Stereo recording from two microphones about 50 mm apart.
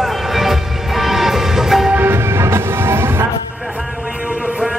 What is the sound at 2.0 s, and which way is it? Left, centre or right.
Music, right.